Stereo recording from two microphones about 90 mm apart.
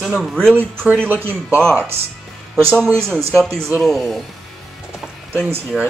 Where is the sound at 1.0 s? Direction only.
20° right (ahead or behind).